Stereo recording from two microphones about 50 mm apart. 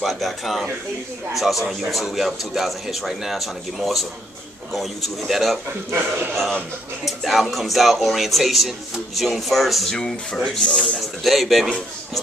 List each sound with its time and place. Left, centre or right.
0.0 s speech: centre
5.9 s speech: right
7.1 s speech: centre
9.9 s speech: centre